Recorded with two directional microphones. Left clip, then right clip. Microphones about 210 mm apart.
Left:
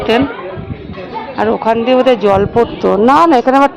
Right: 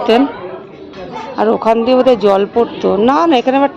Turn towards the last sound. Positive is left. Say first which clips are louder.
# left 3 dB
turn(degrees=5)  # may be behind; listen again after turning